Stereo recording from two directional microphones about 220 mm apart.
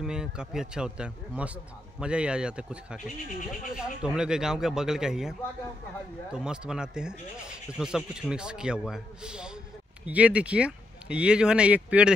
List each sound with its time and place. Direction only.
0.0 s a man's voice: 5° right (ahead or behind)
6.3 s a man's voice: 5° right (ahead or behind)